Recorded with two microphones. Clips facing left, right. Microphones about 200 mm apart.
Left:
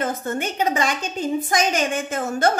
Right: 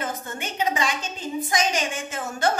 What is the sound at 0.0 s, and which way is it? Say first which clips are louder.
A woman's voice: left 7 dB; 50° left (ahead or behind).